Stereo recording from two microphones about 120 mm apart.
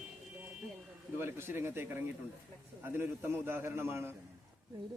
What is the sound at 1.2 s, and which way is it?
A man's voice, 20° right (ahead or behind).